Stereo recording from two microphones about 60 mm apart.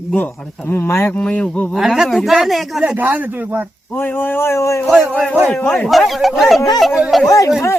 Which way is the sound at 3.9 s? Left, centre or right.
Left.